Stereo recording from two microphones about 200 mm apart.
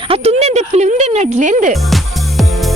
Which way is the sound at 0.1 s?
30° right (ahead or behind).